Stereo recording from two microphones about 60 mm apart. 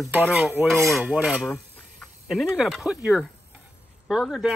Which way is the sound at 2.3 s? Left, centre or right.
Centre.